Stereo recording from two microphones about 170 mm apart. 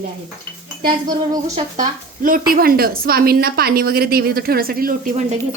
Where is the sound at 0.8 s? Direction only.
25° right (ahead or behind).